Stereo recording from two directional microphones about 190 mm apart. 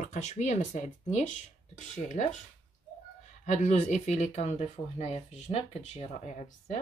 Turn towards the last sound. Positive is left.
turn(degrees=35)  # may be behind; listen again after turning